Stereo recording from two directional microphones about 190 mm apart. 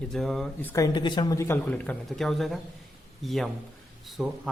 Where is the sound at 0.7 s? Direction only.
20° left (ahead or behind); by 4.3 s centre (ahead or behind).